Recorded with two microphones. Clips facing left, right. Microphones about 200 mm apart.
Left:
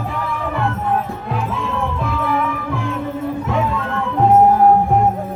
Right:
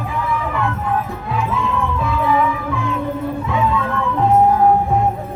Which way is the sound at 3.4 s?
45° left (ahead or behind).